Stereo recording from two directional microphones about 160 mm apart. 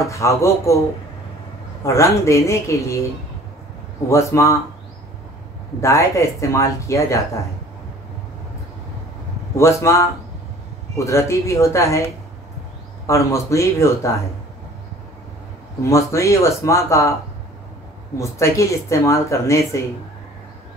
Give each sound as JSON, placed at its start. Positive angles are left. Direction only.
{"t": 0.0, "sound": "speech", "side_deg": 20}
{"t": 1.9, "sound": "speech", "side_deg": 20}
{"t": 4.1, "sound": "speech", "side_deg": 20}
{"t": 5.8, "sound": "speech", "side_deg": 20}
{"t": 9.6, "sound": "speech", "side_deg": 20}
{"t": 11.1, "sound": "speech", "side_deg": 20}
{"t": 13.0, "sound": "speech", "side_deg": 20}
{"t": 15.9, "sound": "speech", "side_deg": 20}
{"t": 18.1, "sound": "speech", "side_deg": 20}